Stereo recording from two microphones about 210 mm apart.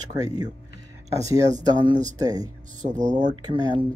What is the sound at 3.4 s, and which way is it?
Speech, 20° right (ahead or behind).